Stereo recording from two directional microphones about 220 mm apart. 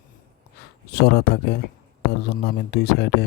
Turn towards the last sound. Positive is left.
turn(degrees=50)  # may be behind; listen again after turning